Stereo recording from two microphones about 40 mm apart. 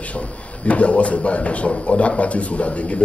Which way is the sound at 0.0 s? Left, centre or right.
Left.